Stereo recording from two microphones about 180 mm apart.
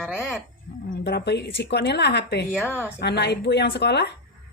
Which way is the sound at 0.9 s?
65° left (ahead or behind).